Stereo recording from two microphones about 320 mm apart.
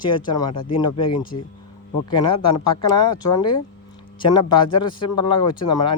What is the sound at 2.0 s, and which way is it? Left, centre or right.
Speech, centre.